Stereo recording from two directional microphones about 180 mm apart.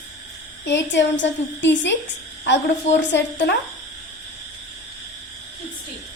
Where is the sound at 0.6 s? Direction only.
75° left (ahead or behind).